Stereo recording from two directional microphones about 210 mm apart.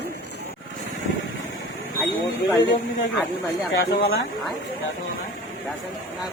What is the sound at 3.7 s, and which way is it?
Speech, 45° left (ahead or behind).